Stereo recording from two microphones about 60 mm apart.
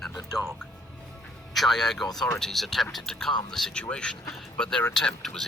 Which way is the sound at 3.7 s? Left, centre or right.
Centre.